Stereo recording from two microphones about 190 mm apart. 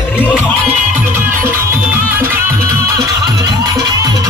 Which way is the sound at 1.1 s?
15° right (ahead or behind).